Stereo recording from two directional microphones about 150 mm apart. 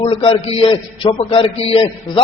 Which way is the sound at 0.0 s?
35° left (ahead or behind).